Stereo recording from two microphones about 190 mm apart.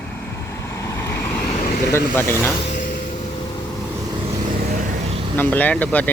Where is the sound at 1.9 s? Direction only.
10° left (ahead or behind).